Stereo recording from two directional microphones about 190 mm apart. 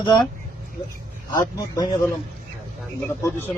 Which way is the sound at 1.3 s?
20° left (ahead or behind).